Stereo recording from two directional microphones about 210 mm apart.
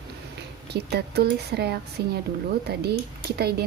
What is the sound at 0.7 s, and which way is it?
A woman's voice, 50° right (ahead or behind).